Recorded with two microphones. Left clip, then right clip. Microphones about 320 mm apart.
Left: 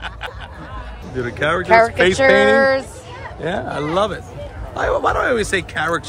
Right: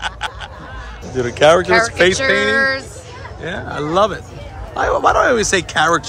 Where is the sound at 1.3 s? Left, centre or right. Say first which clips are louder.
Right 9 dB; centre.